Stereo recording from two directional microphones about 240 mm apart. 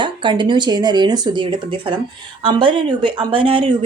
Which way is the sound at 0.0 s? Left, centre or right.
Centre.